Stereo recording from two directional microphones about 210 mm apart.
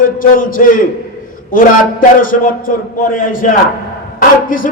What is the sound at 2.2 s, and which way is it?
Speech, 40° left (ahead or behind).